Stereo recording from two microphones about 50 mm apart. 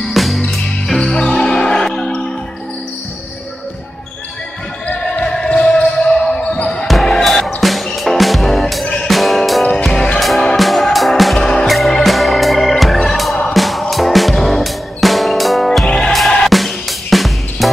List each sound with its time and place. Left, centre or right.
0.1 s music: centre
4.8 s basketball bounce: left
6.9 s music: centre
11.3 s music: centre
11.6 s music: centre
16.4 s drum kit: centre